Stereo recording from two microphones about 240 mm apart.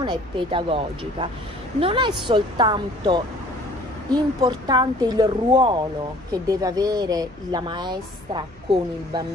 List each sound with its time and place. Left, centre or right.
0.0 s speech: centre